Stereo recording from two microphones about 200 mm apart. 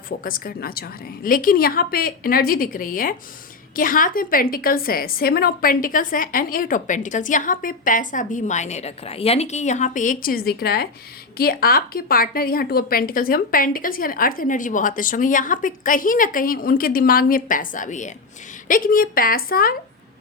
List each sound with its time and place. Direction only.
0.3 s a woman's voice: 45° left (ahead or behind)